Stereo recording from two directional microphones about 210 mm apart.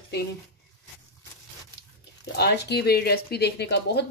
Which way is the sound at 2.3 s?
50° left (ahead or behind).